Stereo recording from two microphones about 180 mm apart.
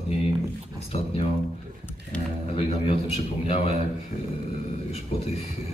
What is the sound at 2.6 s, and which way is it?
A man's voice, 35° left (ahead or behind).